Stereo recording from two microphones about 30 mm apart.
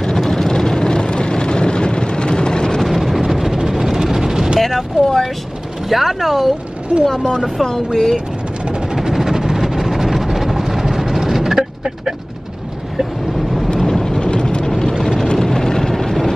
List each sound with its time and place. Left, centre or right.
0.3 s vehicle: centre
2.8 s vehicle: centre
4.6 s a sound: centre
5.9 s speech: centre
6.9 s speech: left
9.0 s vehicle: centre
13.7 s vehicle: centre
14.2 s vehicle: left
14.7 s vehicle: centre